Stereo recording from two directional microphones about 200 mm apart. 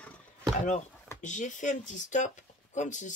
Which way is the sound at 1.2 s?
40° left (ahead or behind).